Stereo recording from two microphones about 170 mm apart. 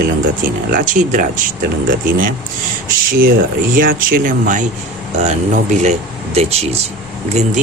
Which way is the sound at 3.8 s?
55° right (ahead or behind).